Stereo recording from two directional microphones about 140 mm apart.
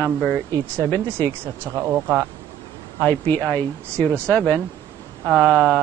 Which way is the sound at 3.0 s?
15° left (ahead or behind).